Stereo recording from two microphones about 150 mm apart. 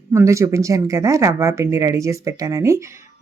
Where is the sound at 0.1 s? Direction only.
20° right (ahead or behind).